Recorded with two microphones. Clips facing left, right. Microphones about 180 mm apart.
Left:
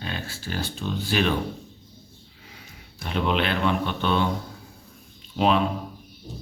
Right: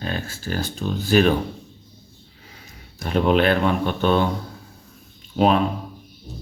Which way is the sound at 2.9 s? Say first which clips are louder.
Right 6 dB; 45° right (ahead or behind).